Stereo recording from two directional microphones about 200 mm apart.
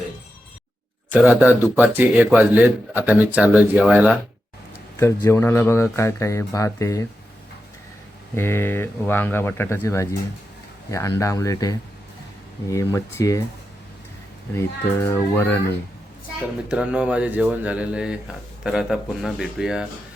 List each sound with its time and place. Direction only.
1.1 s a man's voice: 10° right (ahead or behind)
4.9 s speech: 15° left (ahead or behind)
8.4 s speech: 10° left (ahead or behind)
15.0 s speech: 10° left (ahead or behind)
16.6 s speech: 5° right (ahead or behind)